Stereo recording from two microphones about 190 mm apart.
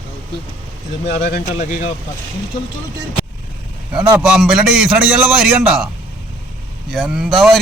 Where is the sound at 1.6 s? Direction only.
40° left (ahead or behind).